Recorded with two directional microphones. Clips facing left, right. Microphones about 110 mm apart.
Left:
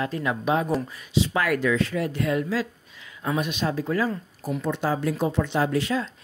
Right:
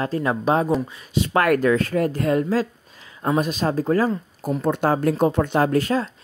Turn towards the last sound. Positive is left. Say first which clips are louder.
# right 4 dB
turn(degrees=-45)  # may be behind; listen again after turning